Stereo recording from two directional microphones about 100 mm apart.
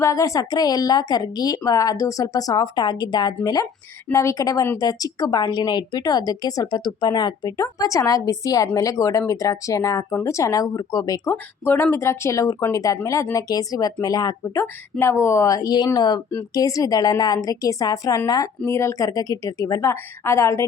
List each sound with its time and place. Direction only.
0.0 s a woman's voice: 35° left (ahead or behind)
11.3 s a woman's voice: 25° left (ahead or behind)